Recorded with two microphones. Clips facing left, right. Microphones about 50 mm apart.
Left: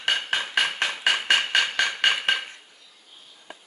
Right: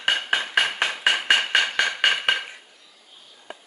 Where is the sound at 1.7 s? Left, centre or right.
Centre.